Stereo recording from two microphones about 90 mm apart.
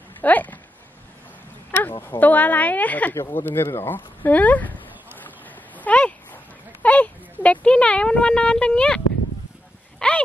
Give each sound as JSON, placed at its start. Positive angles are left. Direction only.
{"t": 0.2, "sound": "speech", "side_deg": 20}
{"t": 1.8, "sound": "speech", "side_deg": 25}
{"t": 5.8, "sound": "a sound", "side_deg": 15}